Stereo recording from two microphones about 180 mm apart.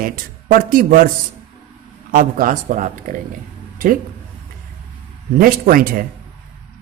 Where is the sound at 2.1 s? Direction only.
50° right (ahead or behind).